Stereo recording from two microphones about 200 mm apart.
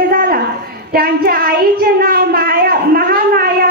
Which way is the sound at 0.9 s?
50° right (ahead or behind).